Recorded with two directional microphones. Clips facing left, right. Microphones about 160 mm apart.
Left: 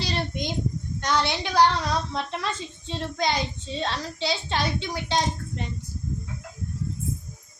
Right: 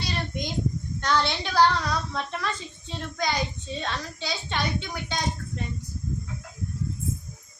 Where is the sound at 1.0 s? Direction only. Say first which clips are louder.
Even; 15° left (ahead or behind).